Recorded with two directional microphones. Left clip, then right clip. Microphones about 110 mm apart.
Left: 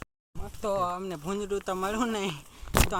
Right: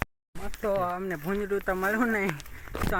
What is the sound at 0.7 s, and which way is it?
Speech, 5° right (ahead or behind).